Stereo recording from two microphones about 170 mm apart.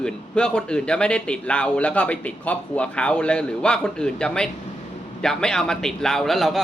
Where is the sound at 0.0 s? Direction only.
5° left (ahead or behind).